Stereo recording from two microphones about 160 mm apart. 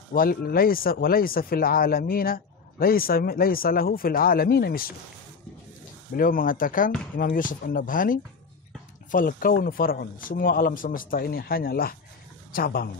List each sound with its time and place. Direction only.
0.1 s speech: 65° left (ahead or behind)
6.1 s speech: 60° left (ahead or behind)